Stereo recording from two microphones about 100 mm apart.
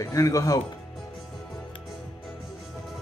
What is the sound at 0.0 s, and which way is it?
Speech, 35° left (ahead or behind).